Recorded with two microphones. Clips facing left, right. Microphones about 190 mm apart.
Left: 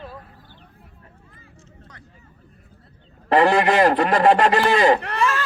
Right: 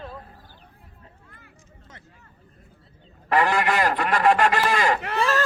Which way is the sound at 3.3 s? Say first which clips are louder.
Left 5 dB; 30° left (ahead or behind).